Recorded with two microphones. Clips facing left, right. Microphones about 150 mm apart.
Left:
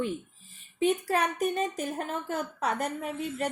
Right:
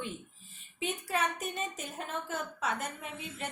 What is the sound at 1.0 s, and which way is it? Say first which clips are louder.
Speech: left 6 dB; 40° left (ahead or behind).